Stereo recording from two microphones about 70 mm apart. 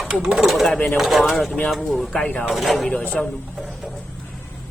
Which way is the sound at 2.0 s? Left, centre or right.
Left.